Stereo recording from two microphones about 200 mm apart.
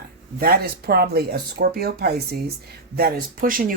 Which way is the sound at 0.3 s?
50° right (ahead or behind).